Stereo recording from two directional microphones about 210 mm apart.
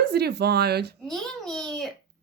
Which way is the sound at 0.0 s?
50° right (ahead or behind).